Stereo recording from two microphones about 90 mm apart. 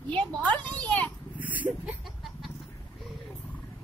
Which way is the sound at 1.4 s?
20° right (ahead or behind).